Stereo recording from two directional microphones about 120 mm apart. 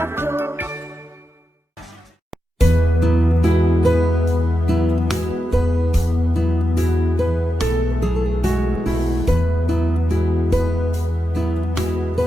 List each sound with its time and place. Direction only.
0.0 s music: 20° right (ahead or behind)
2.6 s music: centre (ahead or behind)